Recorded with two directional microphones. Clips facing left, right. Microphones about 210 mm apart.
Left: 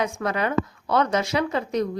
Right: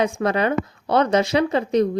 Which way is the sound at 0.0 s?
30° right (ahead or behind).